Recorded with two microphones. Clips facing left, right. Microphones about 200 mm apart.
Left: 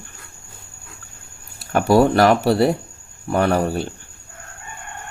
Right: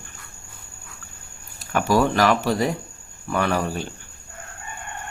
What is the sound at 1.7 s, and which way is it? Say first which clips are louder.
Speech: left 5 dB; 35° left (ahead or behind).